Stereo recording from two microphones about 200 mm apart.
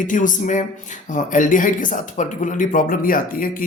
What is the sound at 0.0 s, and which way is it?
A man's voice, 40° left (ahead or behind).